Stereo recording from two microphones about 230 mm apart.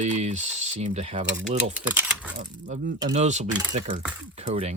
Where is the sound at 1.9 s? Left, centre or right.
Centre.